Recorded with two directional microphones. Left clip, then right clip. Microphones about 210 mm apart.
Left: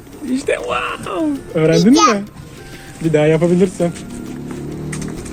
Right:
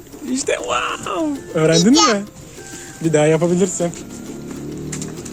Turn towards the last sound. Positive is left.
turn(degrees=-10)  # may be behind; listen again after turning